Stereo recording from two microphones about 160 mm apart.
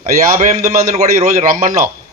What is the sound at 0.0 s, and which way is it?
Speech, 50° right (ahead or behind).